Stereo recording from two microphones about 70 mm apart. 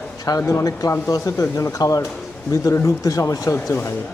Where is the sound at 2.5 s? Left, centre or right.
Left.